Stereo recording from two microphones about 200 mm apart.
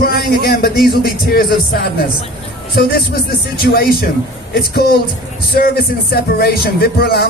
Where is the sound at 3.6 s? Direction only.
50° left (ahead or behind).